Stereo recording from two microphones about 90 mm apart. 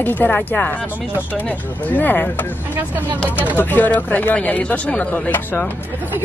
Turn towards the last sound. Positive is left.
turn(degrees=20)  # may be behind; listen again after turning